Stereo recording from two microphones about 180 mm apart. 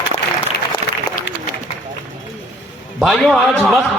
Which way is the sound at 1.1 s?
55° left (ahead or behind).